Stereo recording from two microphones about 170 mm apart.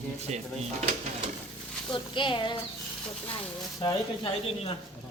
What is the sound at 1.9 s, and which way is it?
Speech, 30° left (ahead or behind).